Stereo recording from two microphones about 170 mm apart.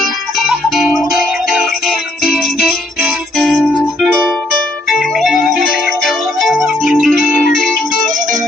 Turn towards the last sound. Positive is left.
turn(degrees=0)  # may be behind; listen again after turning